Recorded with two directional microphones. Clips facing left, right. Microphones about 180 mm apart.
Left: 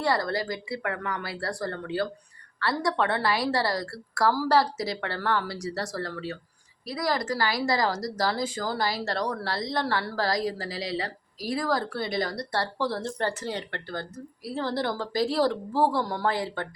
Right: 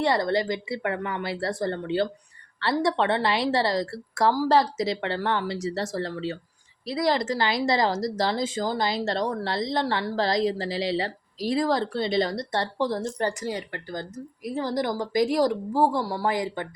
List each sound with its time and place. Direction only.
0.0 s a woman's voice: 20° right (ahead or behind)